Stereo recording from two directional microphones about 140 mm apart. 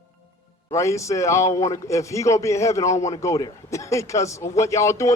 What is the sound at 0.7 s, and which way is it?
A man's voice, 20° left (ahead or behind).